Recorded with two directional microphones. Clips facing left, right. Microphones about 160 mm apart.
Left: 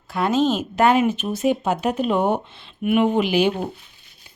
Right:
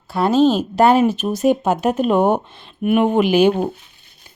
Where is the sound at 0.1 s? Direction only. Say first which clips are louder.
Right 5 dB; 35° right (ahead or behind).